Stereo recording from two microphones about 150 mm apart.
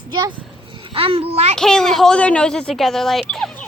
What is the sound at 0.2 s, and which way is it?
A child's voice, 35° right (ahead or behind).